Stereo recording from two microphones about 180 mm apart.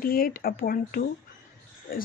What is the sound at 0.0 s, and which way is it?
Speech, 55° left (ahead or behind).